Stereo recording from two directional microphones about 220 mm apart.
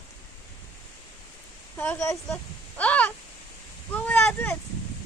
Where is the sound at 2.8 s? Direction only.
5° left (ahead or behind).